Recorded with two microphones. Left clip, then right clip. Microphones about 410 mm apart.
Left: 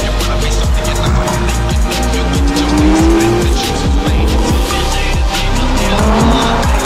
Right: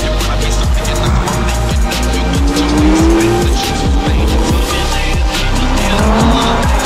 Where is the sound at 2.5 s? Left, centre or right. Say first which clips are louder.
Even; centre.